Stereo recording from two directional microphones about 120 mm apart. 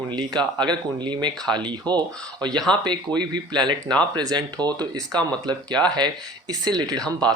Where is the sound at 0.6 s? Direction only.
40° right (ahead or behind).